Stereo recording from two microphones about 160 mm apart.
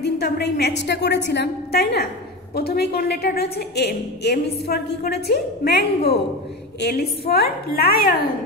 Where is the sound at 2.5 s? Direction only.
80° left.